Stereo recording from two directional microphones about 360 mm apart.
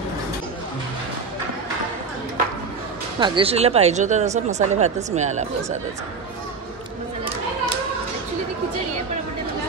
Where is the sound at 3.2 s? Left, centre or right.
Centre.